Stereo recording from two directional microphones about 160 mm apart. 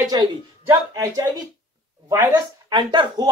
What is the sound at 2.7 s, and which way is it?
Speech, 30° right (ahead or behind).